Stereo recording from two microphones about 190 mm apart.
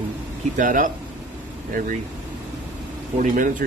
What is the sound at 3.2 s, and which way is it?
Speech, 45° right (ahead or behind).